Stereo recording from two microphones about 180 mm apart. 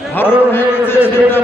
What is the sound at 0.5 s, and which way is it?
Speech, 10° left (ahead or behind).